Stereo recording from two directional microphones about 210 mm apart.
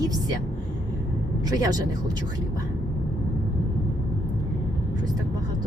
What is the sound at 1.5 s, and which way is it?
Speech, 15° right (ahead or behind).